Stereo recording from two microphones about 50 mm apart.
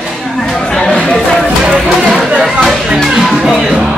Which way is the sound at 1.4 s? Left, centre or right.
Centre.